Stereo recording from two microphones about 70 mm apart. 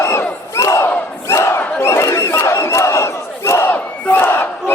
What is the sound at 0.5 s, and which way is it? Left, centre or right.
Battle cry, left.